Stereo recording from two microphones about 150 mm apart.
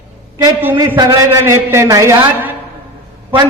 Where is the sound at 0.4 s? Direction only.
15° right (ahead or behind).